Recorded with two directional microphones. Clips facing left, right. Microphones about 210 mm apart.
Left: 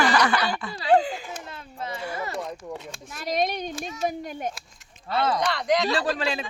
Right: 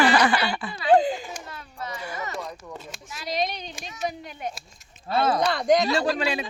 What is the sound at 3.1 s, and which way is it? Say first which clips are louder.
A child's voice: left 3 dB; 50° left (ahead or behind).